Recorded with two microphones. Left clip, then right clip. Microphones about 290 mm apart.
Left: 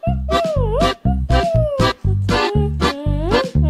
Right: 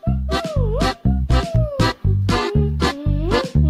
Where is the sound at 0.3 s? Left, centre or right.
Centre.